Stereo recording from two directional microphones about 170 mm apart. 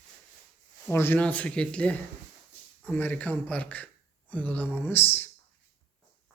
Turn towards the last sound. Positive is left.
turn(degrees=10)  # may be behind; listen again after turning